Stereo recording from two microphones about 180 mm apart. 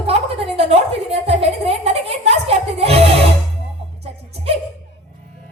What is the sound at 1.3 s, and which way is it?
Music, 35° right (ahead or behind).